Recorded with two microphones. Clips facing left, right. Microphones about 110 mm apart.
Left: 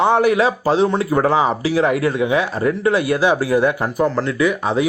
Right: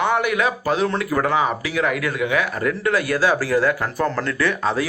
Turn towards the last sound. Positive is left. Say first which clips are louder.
# left 3 dB
turn(degrees=15)  # may be behind; listen again after turning